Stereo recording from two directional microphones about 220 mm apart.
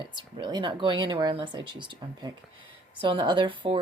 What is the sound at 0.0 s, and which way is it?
Speech, 20° right (ahead or behind).